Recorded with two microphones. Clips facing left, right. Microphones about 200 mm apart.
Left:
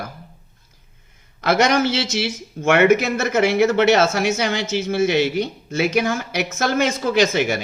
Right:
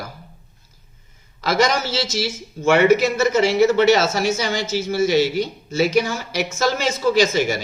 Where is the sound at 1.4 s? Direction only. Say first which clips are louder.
Left 2 dB; 60° left (ahead or behind).